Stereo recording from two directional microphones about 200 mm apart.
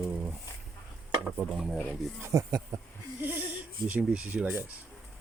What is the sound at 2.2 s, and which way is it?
Speech, 15° right (ahead or behind).